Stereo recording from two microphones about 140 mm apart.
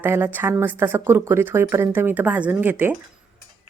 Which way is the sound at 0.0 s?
15° right (ahead or behind).